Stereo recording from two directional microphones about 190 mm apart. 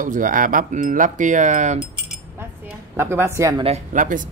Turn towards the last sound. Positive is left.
turn(degrees=-45)  # may be behind; listen again after turning